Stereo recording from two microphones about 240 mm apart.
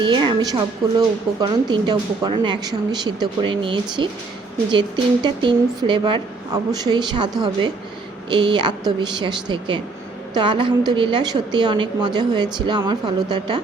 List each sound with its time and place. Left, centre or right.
0.0 s a woman's voice: centre
8.3 s a woman's voice: centre